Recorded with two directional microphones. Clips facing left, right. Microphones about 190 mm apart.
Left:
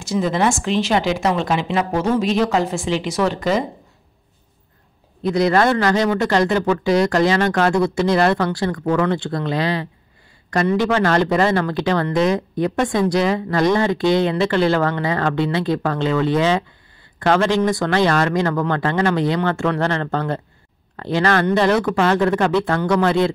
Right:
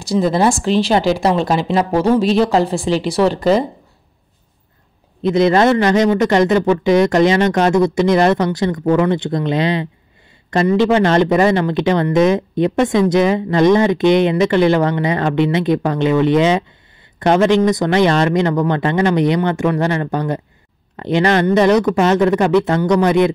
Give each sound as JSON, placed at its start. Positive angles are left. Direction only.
{"t": 0.0, "sound": "a woman's voice", "side_deg": -35}
{"t": 5.2, "sound": "speech", "side_deg": -20}